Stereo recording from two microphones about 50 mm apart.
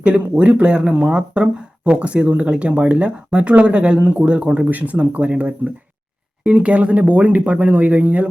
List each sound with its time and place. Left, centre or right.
0.0 s speech: right